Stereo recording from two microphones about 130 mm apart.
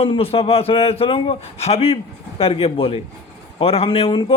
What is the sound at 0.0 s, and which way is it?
A man's voice, 45° left (ahead or behind).